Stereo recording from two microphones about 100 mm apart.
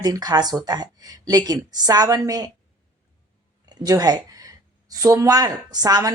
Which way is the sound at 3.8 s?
40° right (ahead or behind).